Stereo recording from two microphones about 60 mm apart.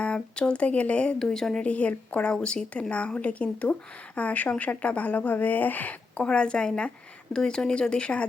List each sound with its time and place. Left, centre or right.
0.0 s speech: centre
1.2 s speech: centre
1.6 s speech: left
6.2 s speech: centre